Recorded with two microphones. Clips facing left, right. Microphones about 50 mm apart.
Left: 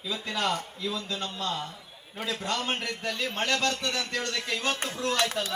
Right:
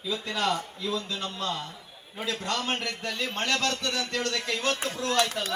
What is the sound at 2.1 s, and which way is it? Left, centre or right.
A man's voice, centre.